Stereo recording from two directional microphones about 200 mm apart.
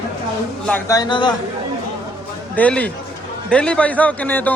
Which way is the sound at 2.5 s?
5° left (ahead or behind).